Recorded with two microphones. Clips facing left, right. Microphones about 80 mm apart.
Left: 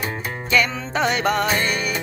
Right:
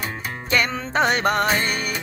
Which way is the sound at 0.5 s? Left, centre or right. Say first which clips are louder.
Left 2 dB; right.